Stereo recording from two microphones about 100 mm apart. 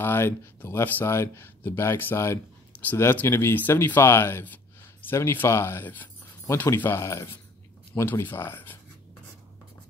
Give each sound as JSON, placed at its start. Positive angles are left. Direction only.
{"t": 0.0, "sound": "speech", "side_deg": 25}